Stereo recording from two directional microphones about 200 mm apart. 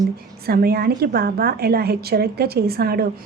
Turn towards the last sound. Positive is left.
turn(degrees=-50)  # may be behind; listen again after turning